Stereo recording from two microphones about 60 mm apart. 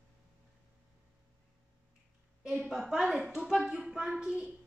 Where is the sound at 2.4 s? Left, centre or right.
Centre.